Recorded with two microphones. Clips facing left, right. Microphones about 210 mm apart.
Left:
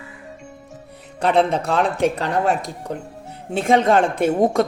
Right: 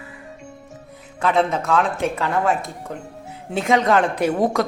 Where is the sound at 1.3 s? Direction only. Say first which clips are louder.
Left 1 dB; 30° left (ahead or behind).